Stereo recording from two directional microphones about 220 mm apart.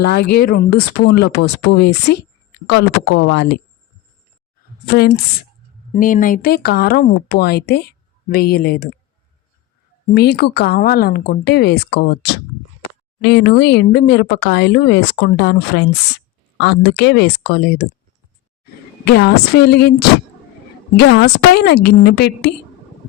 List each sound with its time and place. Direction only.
0.1 s speech: 45° left (ahead or behind)
3.0 s speech: 55° left (ahead or behind)
4.9 s speech: 45° left (ahead or behind)
10.1 s speech: 45° left (ahead or behind)
19.0 s speech: 45° left (ahead or behind)